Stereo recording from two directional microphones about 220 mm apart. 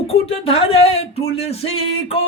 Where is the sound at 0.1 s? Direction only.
25° left (ahead or behind).